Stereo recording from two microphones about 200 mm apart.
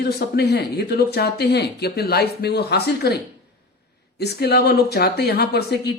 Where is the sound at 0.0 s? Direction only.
50° left (ahead or behind).